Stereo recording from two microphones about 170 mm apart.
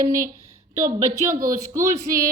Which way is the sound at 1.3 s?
60° right (ahead or behind).